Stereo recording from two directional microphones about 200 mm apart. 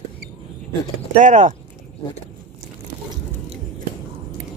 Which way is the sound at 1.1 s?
40° right (ahead or behind).